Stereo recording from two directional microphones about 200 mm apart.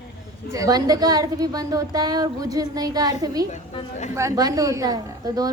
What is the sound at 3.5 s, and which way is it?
Speech, 35° left (ahead or behind).